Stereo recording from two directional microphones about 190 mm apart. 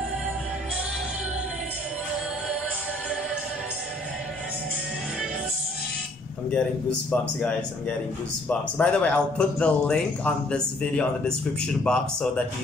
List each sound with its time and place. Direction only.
6.5 s speech: 5° left (ahead or behind)